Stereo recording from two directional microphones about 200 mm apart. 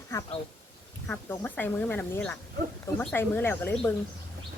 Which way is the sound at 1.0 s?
10° left (ahead or behind).